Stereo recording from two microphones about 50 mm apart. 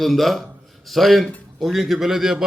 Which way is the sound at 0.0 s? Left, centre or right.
Centre.